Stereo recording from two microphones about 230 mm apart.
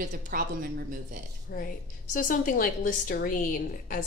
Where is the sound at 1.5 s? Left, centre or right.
Left.